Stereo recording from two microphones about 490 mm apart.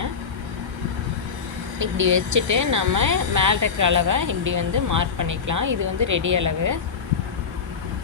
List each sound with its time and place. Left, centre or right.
1.8 s speech: right